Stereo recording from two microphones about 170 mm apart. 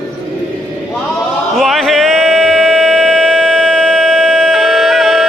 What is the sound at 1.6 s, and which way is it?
Music, centre (ahead or behind).